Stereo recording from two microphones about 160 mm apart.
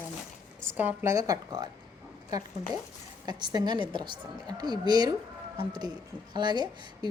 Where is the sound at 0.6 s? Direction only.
15° right (ahead or behind).